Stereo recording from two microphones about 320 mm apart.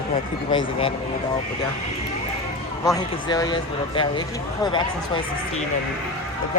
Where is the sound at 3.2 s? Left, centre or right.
Centre.